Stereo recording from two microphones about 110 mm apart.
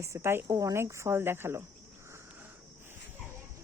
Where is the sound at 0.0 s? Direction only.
25° right (ahead or behind).